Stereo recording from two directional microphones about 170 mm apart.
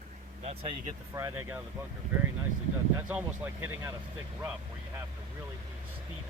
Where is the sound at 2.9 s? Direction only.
10° right (ahead or behind).